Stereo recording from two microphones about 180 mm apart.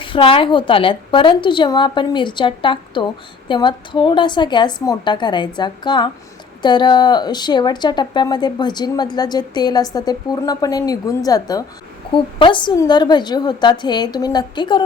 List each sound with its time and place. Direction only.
0.0 s speech: 30° left (ahead or behind)